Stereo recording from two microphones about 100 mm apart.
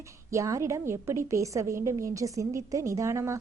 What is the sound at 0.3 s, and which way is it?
A woman's voice, 30° right (ahead or behind).